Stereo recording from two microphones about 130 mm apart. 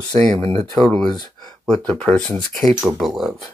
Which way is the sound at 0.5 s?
35° right (ahead or behind).